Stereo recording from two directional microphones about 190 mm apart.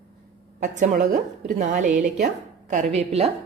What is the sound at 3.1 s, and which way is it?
Speech, 30° right (ahead or behind).